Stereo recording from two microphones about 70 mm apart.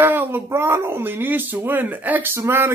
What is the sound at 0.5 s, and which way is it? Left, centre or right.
Speech, right.